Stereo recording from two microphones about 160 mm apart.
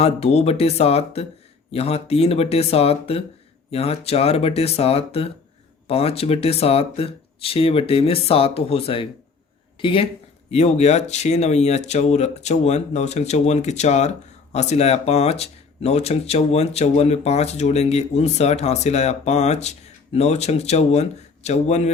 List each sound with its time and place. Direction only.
0.0 s speech: 40° left (ahead or behind)
10.5 s speech: 45° left (ahead or behind)